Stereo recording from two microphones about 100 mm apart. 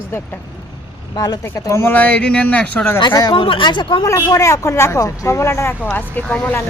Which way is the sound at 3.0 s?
45° left (ahead or behind).